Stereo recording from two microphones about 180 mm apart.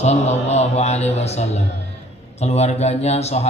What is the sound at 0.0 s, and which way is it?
A man's voice, 35° left (ahead or behind).